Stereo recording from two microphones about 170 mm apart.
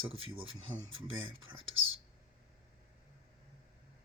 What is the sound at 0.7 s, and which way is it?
Speech, 25° right (ahead or behind).